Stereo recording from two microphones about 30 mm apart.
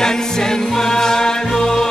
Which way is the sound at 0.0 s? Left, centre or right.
Left.